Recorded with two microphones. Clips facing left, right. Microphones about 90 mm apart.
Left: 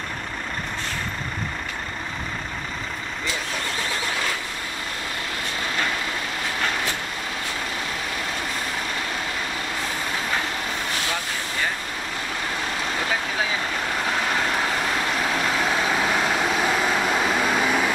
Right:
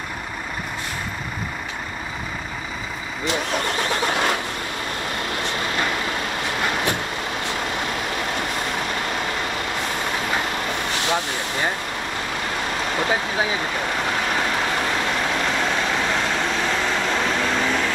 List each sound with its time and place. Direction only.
3.3 s vehicle: 65° right (ahead or behind)
11.1 s vehicle: 20° right (ahead or behind)
15.2 s vehicle: 5° left (ahead or behind)